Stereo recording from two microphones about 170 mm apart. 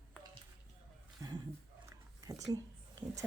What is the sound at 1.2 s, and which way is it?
Roaring cats, 20° right (ahead or behind).